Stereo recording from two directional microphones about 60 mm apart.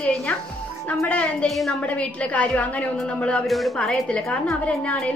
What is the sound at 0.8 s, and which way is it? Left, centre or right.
Speech, left.